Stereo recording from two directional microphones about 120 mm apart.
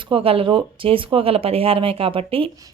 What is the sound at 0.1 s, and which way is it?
Speech, 50° right (ahead or behind).